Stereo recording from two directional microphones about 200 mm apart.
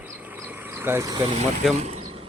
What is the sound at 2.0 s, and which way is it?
Bee, 25° right (ahead or behind).